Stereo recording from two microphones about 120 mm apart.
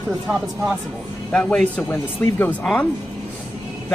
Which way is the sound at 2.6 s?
5° left (ahead or behind).